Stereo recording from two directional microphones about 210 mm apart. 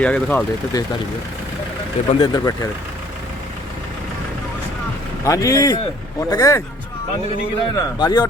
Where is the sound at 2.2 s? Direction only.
20° left (ahead or behind).